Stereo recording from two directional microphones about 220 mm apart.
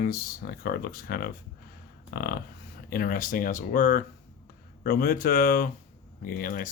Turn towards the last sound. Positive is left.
turn(degrees=40)  # may be behind; listen again after turning